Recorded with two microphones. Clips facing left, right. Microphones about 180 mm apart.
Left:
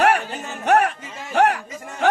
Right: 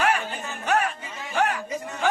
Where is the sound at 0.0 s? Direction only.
70° left (ahead or behind).